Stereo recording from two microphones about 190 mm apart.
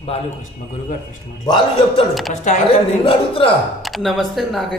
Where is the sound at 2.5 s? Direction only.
45° left (ahead or behind).